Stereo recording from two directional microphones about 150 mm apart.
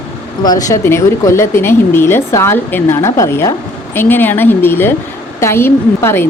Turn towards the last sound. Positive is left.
turn(degrees=15)  # may be behind; listen again after turning